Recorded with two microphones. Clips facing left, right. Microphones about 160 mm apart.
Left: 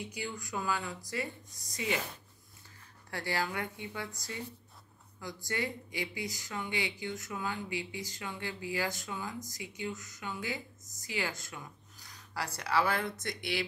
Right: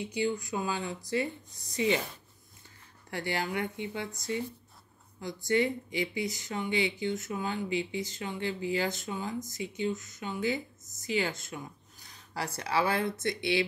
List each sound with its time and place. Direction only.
0.0 s speech: 25° right (ahead or behind)
3.1 s speech: 20° right (ahead or behind)